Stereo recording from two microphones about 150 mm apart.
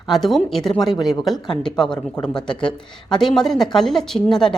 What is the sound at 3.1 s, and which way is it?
Speech, 5° left (ahead or behind).